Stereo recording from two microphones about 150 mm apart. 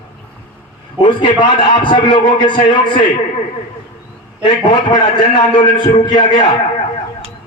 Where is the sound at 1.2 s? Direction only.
30° left (ahead or behind).